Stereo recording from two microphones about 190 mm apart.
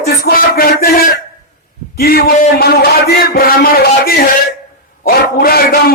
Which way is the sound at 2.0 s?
55° left (ahead or behind).